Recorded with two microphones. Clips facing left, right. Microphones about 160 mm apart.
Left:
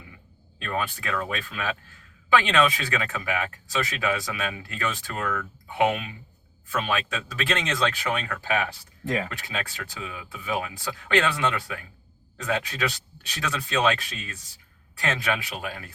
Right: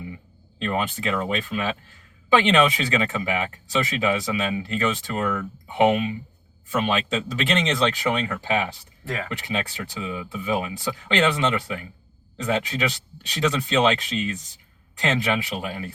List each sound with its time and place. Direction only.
0.6 s speech: 20° right (ahead or behind)